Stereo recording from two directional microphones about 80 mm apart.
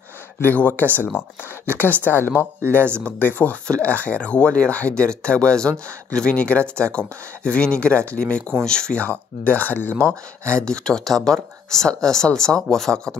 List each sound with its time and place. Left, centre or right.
0.4 s speech: left; by 13.1 s centre